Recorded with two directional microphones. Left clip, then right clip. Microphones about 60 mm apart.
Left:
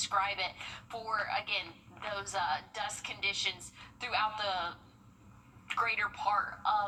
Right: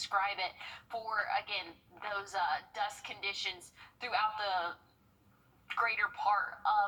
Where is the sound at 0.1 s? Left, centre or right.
Right.